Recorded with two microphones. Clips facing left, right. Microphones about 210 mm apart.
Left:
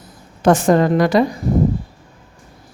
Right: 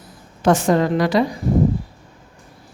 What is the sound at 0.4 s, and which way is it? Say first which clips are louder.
Speech: left 3 dB; 50° left (ahead or behind).